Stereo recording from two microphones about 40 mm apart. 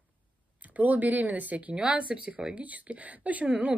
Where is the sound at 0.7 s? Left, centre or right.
Right.